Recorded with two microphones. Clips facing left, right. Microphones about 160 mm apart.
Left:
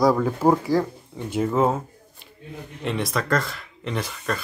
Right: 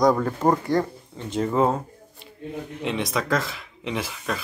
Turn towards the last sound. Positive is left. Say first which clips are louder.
# left 1 dB
turn(degrees=0)  # may be behind; listen again after turning